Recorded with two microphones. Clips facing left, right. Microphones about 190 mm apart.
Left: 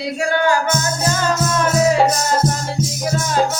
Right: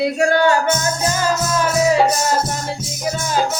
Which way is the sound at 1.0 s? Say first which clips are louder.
Left 1 dB; 10° right (ahead or behind).